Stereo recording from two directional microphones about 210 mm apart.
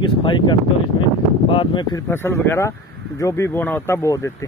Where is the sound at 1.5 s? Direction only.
20° left (ahead or behind).